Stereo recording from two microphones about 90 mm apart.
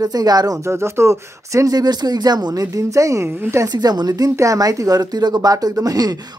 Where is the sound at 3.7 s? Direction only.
50° right (ahead or behind).